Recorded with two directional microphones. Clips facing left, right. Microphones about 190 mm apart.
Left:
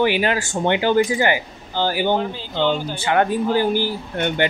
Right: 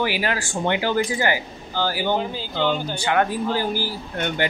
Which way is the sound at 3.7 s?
20° left (ahead or behind).